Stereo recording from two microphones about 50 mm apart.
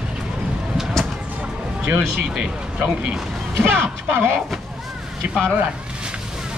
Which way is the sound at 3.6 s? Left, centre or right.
Right.